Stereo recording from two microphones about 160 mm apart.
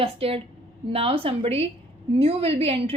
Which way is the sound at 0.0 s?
35° right (ahead or behind).